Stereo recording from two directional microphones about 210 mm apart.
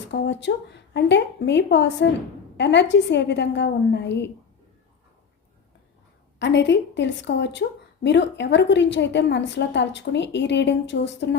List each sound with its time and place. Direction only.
0.1 s a woman's voice: 55° left (ahead or behind)
6.4 s a woman's voice: 55° left (ahead or behind)